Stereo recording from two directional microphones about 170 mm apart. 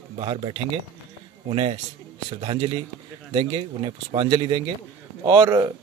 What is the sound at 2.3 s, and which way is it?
Speech, 30° right (ahead or behind).